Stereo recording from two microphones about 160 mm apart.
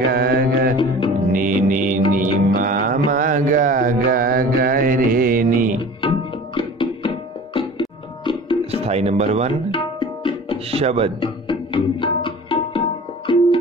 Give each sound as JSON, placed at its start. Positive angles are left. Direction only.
{"t": 0.1, "sound": "music", "side_deg": -75}
{"t": 0.7, "sound": "music", "side_deg": 30}
{"t": 1.3, "sound": "music", "side_deg": -55}
{"t": 3.1, "sound": "mantra", "side_deg": -55}
{"t": 5.9, "sound": "music", "side_deg": 30}
{"t": 8.2, "sound": "music", "side_deg": 30}
{"t": 8.8, "sound": "music", "side_deg": -40}
{"t": 9.7, "sound": "tabla", "side_deg": 30}
{"t": 10.7, "sound": "speech", "side_deg": -40}
{"t": 11.1, "sound": "music", "side_deg": 30}